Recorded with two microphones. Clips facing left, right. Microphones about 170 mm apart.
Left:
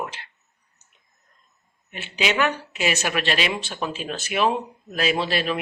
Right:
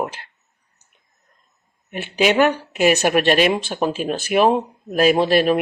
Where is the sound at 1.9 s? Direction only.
50° right (ahead or behind).